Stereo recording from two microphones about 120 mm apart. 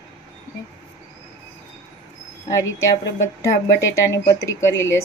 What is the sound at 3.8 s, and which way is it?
Speech, 25° left (ahead or behind).